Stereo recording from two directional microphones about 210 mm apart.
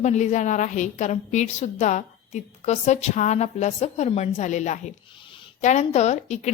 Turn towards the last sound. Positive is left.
turn(degrees=35)  # may be behind; listen again after turning